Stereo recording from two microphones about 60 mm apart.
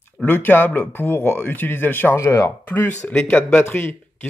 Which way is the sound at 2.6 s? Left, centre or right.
Left.